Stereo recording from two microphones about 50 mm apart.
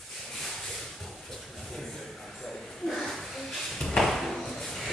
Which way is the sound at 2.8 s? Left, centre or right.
Centre.